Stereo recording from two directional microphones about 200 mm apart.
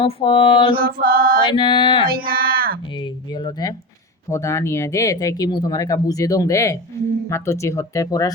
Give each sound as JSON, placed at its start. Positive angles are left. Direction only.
{"t": 0.0, "sound": "speech", "side_deg": 25}
{"t": 0.7, "sound": "mantra", "side_deg": -45}
{"t": 1.5, "sound": "speech", "side_deg": 25}
{"t": 2.0, "sound": "a sound", "side_deg": -45}
{"t": 3.0, "sound": "speech", "side_deg": 25}